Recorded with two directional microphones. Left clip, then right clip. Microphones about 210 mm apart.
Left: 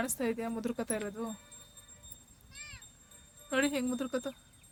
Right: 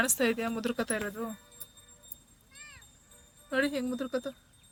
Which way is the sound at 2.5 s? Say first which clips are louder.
Left 2 dB; 45° left (ahead or behind).